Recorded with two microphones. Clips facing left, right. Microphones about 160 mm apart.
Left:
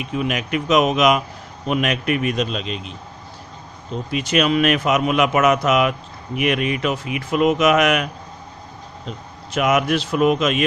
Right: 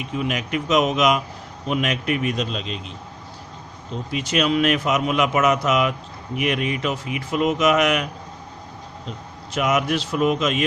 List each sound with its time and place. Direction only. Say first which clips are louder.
0.0 s a man's voice: left 2 dB; 65° left (ahead or behind)
4.1 s a man's voice: left 2 dB; 60° left (ahead or behind)
9.6 s a man's voice: left 3 dB; 65° left (ahead or behind)